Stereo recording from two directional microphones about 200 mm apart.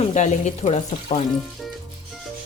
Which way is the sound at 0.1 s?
35° left (ahead or behind).